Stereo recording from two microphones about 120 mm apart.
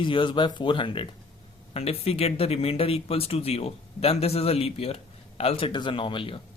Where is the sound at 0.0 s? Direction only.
45° left (ahead or behind).